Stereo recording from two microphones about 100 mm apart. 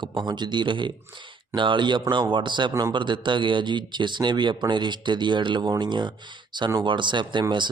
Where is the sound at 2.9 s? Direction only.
50° right (ahead or behind).